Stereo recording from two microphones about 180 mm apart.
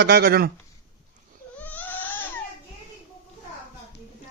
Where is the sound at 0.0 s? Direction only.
60° right (ahead or behind).